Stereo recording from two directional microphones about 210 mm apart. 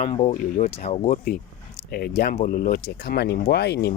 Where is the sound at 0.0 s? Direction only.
25° left (ahead or behind).